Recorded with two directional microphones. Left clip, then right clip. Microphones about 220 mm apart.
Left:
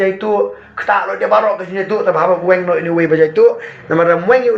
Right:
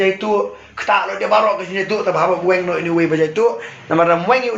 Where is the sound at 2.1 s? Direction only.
25° right (ahead or behind).